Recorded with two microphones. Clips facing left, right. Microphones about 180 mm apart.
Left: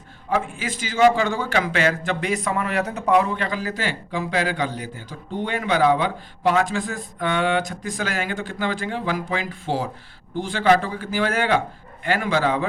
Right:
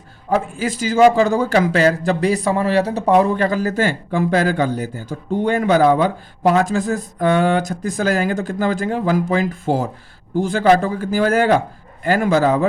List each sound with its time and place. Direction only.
0.3 s a man's voice: 40° right (ahead or behind)